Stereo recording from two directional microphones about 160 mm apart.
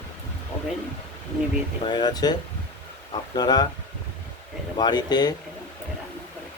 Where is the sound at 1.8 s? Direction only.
30° left (ahead or behind).